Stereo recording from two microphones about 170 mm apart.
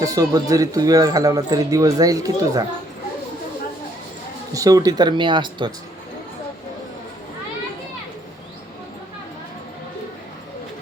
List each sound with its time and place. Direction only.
0.0 s speech: 20° right (ahead or behind)
4.5 s speech: 20° right (ahead or behind)